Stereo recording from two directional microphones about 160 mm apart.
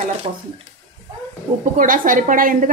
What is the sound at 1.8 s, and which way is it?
Speech, 60° right (ahead or behind).